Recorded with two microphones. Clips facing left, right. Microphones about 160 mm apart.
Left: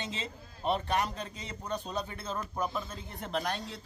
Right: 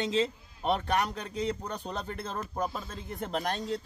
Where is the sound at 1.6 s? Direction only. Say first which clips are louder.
Even; 60° right (ahead or behind).